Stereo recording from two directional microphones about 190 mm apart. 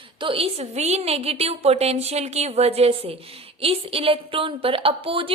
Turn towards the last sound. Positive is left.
turn(degrees=-30)  # may be behind; listen again after turning